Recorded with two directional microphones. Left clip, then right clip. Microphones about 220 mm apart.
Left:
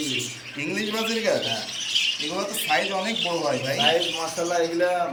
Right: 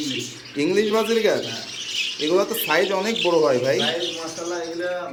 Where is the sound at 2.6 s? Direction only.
15° right (ahead or behind).